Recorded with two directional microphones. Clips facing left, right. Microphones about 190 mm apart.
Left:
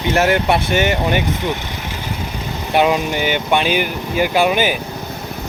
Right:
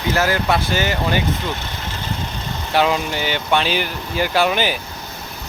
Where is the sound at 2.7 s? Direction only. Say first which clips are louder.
Left 3 dB; 15° left (ahead or behind).